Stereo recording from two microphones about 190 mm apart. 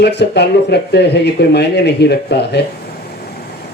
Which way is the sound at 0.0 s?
60° left (ahead or behind).